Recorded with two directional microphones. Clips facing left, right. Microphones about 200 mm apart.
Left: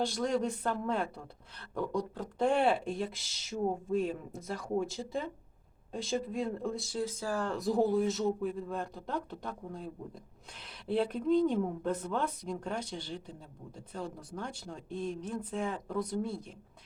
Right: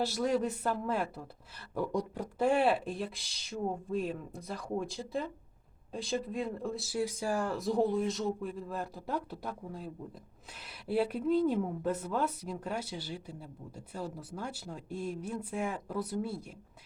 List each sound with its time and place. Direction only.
0.0 s speech: 5° right (ahead or behind)
7.5 s a woman's voice: centre (ahead or behind)